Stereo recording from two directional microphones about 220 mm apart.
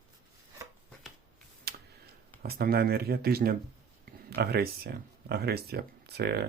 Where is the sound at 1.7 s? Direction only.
45° right (ahead or behind).